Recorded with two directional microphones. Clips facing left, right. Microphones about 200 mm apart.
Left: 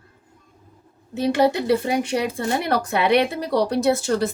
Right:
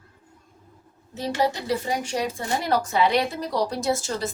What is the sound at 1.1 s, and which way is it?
Speech, 60° left (ahead or behind).